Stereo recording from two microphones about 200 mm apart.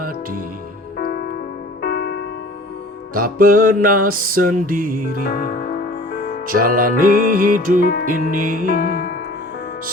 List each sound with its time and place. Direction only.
0.0 s music: 45° right (ahead or behind)
0.9 s music: 50° left (ahead or behind)
3.2 s music: 45° right (ahead or behind)
5.3 s music: 45° left (ahead or behind)
6.5 s music: 45° right (ahead or behind)
7.8 s music: 50° left (ahead or behind)
8.0 s music: 45° right (ahead or behind)
8.6 s music: 50° left (ahead or behind)